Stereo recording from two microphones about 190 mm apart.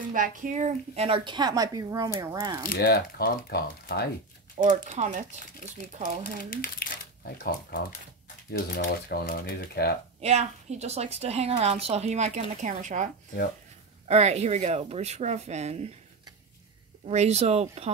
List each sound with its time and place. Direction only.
0.1 s a woman's voice: 45° right (ahead or behind); by 2.6 s 20° right (ahead or behind)
2.7 s speech: 55° left (ahead or behind)
4.6 s a woman's voice: 40° right (ahead or behind)
6.5 s speech: 50° left (ahead or behind)
10.2 s a woman's voice: 35° right (ahead or behind)
17.1 s a woman's voice: 35° right (ahead or behind)